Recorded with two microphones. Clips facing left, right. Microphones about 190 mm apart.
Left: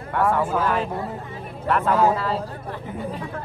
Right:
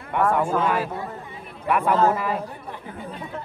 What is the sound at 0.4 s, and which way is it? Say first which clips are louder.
Speech: even; 5° left (ahead or behind).